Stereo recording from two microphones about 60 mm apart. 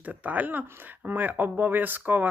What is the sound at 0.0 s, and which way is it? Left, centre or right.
Speech, right.